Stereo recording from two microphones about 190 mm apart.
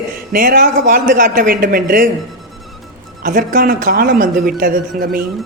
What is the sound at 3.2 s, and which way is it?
A man's voice, 50° right (ahead or behind).